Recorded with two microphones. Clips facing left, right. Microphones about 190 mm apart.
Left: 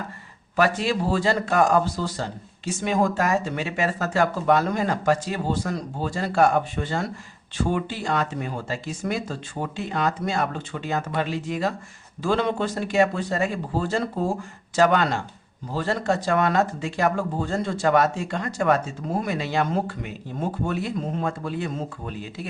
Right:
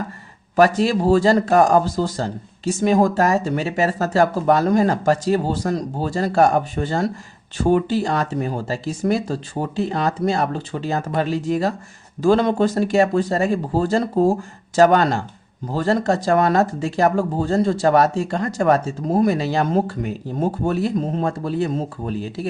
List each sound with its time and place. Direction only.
0.5 s speech: 40° right (ahead or behind)